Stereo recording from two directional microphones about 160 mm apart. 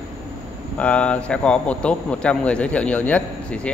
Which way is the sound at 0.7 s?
5° left (ahead or behind).